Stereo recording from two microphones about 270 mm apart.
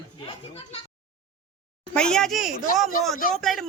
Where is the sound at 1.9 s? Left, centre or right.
Centre.